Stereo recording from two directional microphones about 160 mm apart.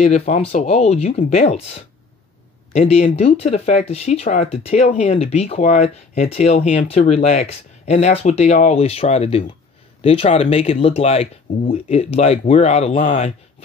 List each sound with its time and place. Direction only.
0.0 s speech: 45° left (ahead or behind)